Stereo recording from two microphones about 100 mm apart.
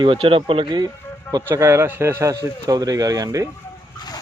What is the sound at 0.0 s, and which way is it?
Speech, 60° right (ahead or behind).